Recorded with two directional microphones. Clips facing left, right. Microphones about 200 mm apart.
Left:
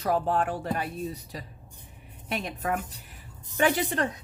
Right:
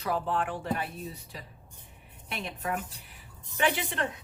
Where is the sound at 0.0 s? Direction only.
40° left (ahead or behind).